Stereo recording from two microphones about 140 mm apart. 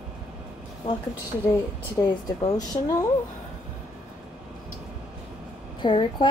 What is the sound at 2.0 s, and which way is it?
Speech, 25° left (ahead or behind).